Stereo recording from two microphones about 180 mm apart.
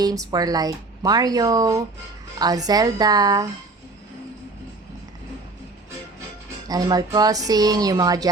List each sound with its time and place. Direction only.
0.0 s speech: 20° right (ahead or behind)
6.7 s speech: 20° right (ahead or behind)